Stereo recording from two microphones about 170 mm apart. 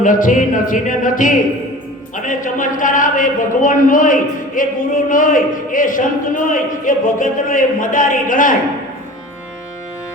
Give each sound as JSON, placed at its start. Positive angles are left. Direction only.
{"t": 0.0, "sound": "speech", "side_deg": 50}